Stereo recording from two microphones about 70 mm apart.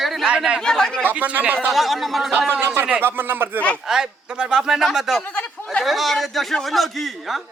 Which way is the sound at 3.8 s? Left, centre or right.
Centre.